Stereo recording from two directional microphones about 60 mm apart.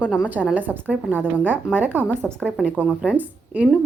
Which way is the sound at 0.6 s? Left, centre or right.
Right.